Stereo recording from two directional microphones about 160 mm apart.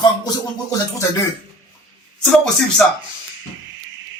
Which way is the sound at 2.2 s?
5° left (ahead or behind).